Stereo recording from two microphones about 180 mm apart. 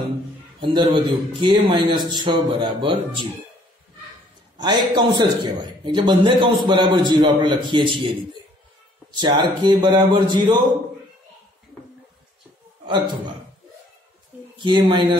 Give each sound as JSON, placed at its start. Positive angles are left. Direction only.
{"t": 0.6, "sound": "a man's voice", "side_deg": -25}
{"t": 4.6, "sound": "a man's voice", "side_deg": -25}
{"t": 9.1, "sound": "a man's voice", "side_deg": -25}
{"t": 12.8, "sound": "a man's voice", "side_deg": -25}
{"t": 14.6, "sound": "a man's voice", "side_deg": -25}